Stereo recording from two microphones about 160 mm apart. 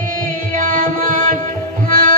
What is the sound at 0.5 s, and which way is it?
Music, 60° right (ahead or behind).